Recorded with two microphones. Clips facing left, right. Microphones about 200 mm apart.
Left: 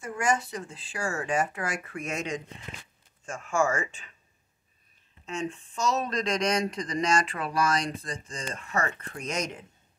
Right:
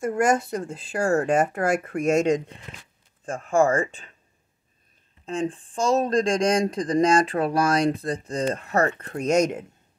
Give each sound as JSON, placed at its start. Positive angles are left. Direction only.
{"t": 0.0, "sound": "speech", "side_deg": -50}
{"t": 3.5, "sound": "speech", "side_deg": -55}
{"t": 3.8, "sound": "speech", "side_deg": -35}
{"t": 5.6, "sound": "speech", "side_deg": -50}
{"t": 8.8, "sound": "speech", "side_deg": -40}